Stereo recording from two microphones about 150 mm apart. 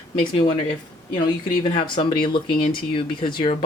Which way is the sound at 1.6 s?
35° left (ahead or behind).